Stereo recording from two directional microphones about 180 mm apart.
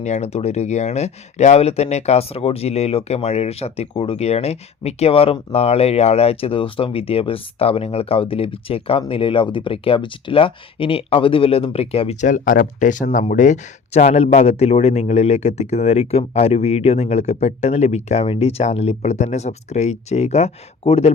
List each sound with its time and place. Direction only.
0.0 s speech: 40° left (ahead or behind)